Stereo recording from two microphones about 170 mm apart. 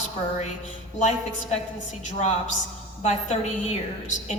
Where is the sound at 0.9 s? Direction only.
45° left (ahead or behind).